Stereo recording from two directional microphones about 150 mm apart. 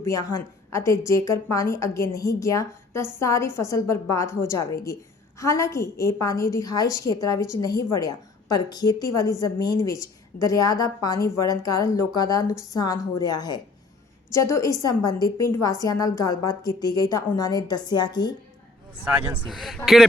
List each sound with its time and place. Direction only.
0.0 s a woman's voice: 20° left (ahead or behind)
19.0 s speech: 15° right (ahead or behind)
19.4 s speech: centre (ahead or behind)